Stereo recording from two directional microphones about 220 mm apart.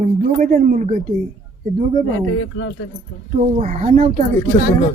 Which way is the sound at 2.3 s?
70° left (ahead or behind).